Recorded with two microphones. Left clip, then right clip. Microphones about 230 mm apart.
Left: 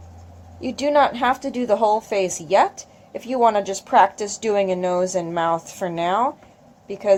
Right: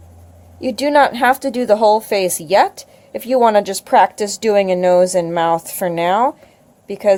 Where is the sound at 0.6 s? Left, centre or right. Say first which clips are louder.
Right 5 dB; right.